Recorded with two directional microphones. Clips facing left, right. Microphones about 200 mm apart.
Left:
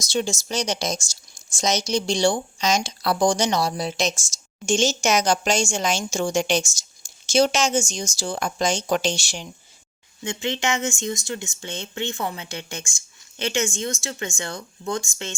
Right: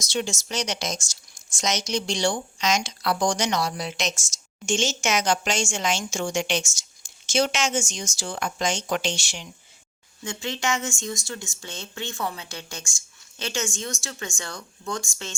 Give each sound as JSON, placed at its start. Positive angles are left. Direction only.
{"t": 0.0, "sound": "speech", "side_deg": 35}
{"t": 10.2, "sound": "speech", "side_deg": 20}